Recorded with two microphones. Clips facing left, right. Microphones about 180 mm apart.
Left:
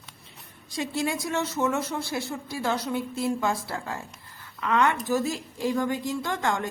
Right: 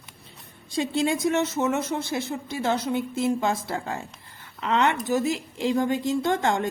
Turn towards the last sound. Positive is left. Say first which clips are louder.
# right 4 dB
turn(degrees=-25)  # may be behind; listen again after turning